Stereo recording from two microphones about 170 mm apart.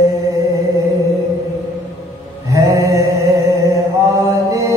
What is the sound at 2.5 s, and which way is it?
Mantra, 15° right (ahead or behind).